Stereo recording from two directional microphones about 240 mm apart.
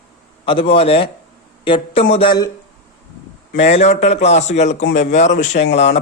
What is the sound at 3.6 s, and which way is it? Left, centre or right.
Speech, left.